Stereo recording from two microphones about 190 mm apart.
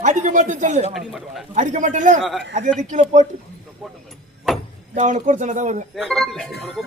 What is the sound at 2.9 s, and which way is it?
Speech, 40° right (ahead or behind).